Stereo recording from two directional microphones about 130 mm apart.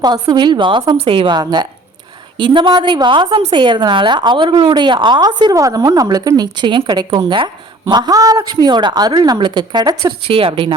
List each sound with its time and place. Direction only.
0.0 s a woman's voice: 30° right (ahead or behind)
10.2 s a woman's voice: 45° right (ahead or behind)